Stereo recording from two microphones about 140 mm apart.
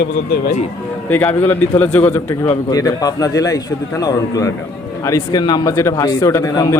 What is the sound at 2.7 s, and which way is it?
A man's voice, 25° left (ahead or behind).